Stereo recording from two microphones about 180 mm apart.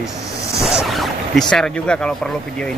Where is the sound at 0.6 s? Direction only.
Centre (ahead or behind).